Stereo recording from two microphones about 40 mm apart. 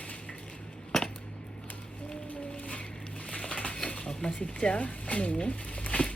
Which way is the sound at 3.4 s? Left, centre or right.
Left.